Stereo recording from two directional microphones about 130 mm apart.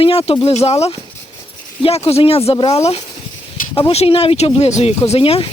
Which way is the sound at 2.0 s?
50° left (ahead or behind).